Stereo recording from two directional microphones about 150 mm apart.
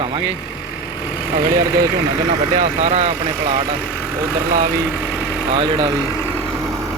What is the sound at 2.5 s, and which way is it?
Speech, 50° right (ahead or behind).